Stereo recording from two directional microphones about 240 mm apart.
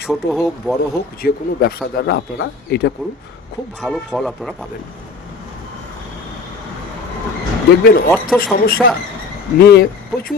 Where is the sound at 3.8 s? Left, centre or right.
Centre.